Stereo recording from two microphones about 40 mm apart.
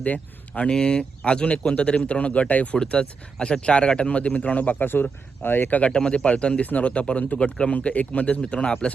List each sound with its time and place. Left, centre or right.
0.0 s speech: left
0.7 s speech: left
2.7 s speech: centre; by 4.9 s left
5.4 s speech: left
5.9 s speech: centre
6.1 s speech: left